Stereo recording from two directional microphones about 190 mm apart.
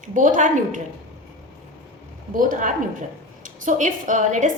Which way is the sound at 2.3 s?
45° right (ahead or behind).